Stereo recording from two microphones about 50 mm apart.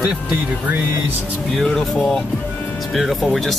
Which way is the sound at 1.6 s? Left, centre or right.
Centre.